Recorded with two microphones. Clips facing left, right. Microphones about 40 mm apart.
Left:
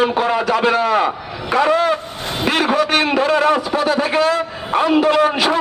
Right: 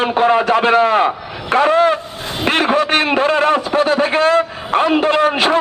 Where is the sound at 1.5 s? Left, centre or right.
Right.